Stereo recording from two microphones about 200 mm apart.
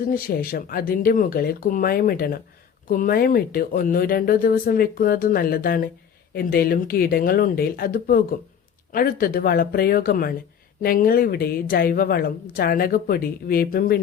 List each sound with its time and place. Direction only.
0.1 s a woman's voice: 45° left (ahead or behind)